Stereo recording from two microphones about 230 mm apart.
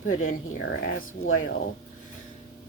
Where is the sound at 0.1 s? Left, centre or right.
Left.